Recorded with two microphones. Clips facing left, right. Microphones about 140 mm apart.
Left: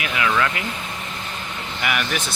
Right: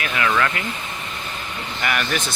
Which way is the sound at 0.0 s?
10° left (ahead or behind).